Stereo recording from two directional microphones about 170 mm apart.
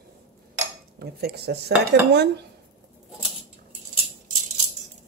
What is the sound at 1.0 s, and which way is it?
Speech, 70° right (ahead or behind).